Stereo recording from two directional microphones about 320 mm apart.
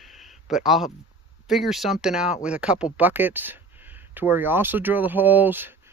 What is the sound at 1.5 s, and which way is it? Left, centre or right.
Speech, centre.